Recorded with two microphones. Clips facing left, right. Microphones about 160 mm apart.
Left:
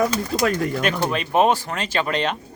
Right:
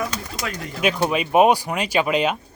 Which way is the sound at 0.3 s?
40° left (ahead or behind).